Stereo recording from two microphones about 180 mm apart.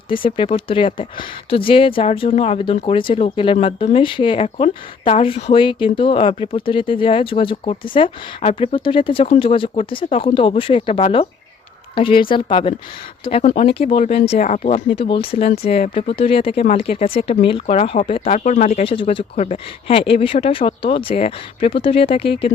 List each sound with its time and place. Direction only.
0.1 s speech: 30° left (ahead or behind)